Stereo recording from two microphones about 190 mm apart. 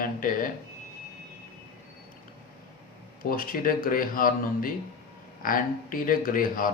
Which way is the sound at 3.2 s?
50° left (ahead or behind).